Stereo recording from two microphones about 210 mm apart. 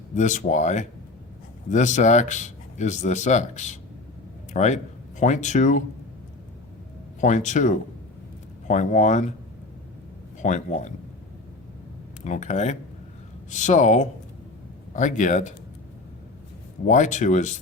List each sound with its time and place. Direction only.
0.1 s speech: 35° left (ahead or behind)
7.2 s speech: 35° left (ahead or behind)
10.4 s speech: 35° left (ahead or behind)
12.2 s speech: 35° left (ahead or behind)
16.8 s speech: 35° left (ahead or behind)